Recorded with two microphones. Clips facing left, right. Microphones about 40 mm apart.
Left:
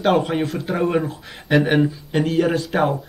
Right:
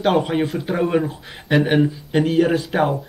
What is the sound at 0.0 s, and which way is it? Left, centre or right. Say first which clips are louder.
Speech: even; centre.